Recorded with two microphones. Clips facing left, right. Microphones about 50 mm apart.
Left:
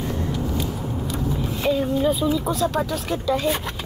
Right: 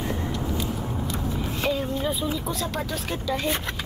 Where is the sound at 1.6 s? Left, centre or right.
Centre.